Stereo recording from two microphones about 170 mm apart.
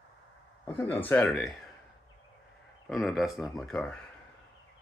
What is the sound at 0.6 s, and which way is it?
Speech, 15° left (ahead or behind).